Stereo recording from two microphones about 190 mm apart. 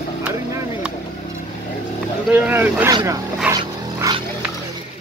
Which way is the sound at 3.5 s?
20° right (ahead or behind).